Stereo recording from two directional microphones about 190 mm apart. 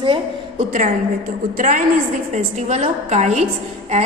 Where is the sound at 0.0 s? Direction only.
25° right (ahead or behind).